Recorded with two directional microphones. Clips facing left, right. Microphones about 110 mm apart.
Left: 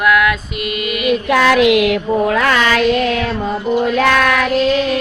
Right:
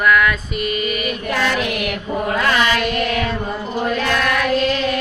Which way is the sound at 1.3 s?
90° left.